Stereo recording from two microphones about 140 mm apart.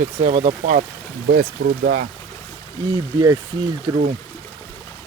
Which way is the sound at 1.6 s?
90° right.